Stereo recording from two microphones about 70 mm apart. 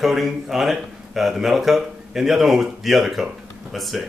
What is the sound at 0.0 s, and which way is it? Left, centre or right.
Speech, centre.